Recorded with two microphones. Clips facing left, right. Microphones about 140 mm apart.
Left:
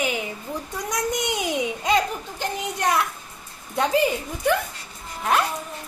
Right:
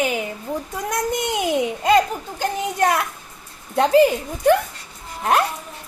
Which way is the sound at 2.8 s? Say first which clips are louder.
Right 3 dB; 50° right (ahead or behind).